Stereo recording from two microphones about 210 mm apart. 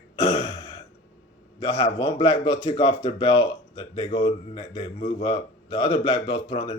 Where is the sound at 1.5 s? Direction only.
25° left (ahead or behind).